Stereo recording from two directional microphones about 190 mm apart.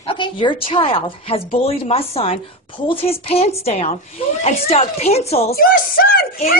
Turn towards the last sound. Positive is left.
turn(degrees=50)  # may be behind; listen again after turning